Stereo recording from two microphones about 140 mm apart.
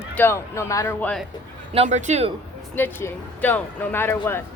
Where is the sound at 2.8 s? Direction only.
15° left (ahead or behind).